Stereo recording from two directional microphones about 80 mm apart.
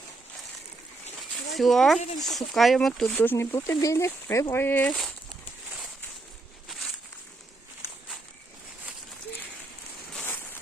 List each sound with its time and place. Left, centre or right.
1.5 s speech: centre
3.2 s speech: left
4.5 s speech: left
4.9 s speech: centre
6.7 s a sound: centre
10.2 s a sound: left